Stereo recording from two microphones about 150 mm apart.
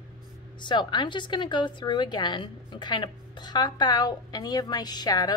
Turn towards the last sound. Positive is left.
turn(degrees=25)  # may be behind; listen again after turning